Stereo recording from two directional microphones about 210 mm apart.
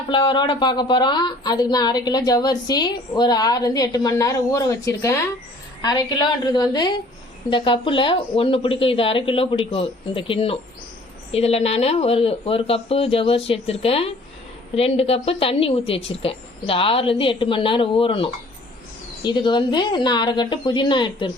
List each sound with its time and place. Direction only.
0.1 s speech: 20° left (ahead or behind)